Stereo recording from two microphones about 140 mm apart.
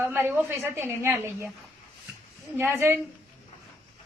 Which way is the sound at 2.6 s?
15° right (ahead or behind).